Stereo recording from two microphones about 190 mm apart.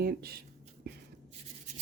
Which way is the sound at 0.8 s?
60° right (ahead or behind).